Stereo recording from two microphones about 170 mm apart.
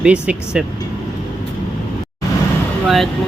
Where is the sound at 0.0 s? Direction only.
5° right (ahead or behind).